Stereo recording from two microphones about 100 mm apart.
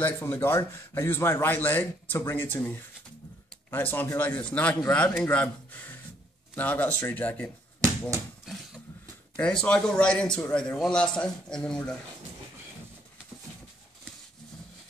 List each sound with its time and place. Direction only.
0.0 s a man's voice: 25° left (ahead or behind)
3.7 s a man's voice: 20° left (ahead or behind)
9.4 s a man's voice: 10° left (ahead or behind)